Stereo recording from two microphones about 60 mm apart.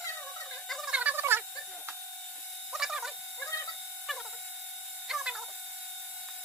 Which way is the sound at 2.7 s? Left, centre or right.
Centre.